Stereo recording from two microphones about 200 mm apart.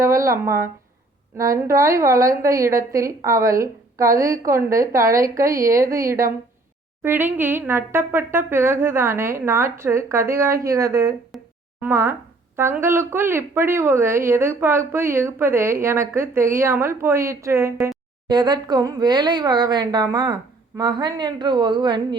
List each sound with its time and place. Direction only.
0.0 s speech: 15° right (ahead or behind)
11.3 s a sound: centre (ahead or behind)
11.8 s speech: 10° right (ahead or behind)